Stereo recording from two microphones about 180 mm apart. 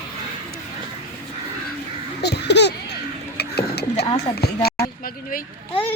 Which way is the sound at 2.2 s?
65° left (ahead or behind).